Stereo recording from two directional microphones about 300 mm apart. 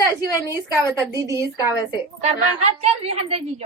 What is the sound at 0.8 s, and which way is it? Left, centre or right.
A woman's voice, centre.